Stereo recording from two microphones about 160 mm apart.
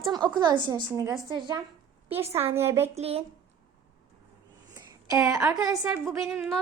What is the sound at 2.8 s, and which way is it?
Speech, 40° right (ahead or behind).